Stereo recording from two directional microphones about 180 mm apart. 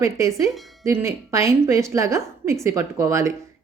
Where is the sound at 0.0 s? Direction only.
15° right (ahead or behind).